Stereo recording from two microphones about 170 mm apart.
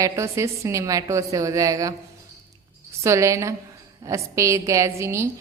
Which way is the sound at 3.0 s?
20° right (ahead or behind).